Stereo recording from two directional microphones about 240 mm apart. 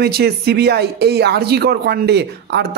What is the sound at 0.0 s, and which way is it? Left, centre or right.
Speech, right.